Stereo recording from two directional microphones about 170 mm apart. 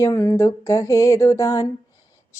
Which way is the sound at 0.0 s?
15° left (ahead or behind).